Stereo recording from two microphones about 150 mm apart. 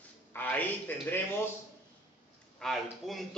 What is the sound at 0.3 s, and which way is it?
Speech, 10° left (ahead or behind).